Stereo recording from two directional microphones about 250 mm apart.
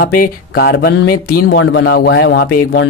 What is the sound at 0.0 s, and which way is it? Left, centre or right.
A man's voice, left.